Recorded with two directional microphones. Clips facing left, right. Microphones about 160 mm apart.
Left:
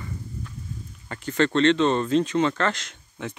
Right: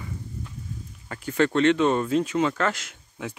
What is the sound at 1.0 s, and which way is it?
Speech, 5° right (ahead or behind).